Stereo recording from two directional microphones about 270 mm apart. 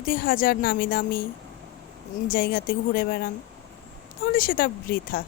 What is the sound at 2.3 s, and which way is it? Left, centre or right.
Speech, left.